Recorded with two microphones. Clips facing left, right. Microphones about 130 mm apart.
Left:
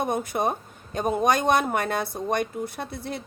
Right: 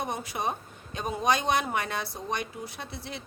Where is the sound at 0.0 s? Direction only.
50° left (ahead or behind).